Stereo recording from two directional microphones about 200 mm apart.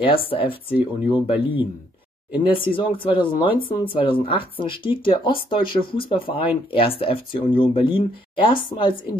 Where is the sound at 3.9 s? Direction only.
25° left (ahead or behind).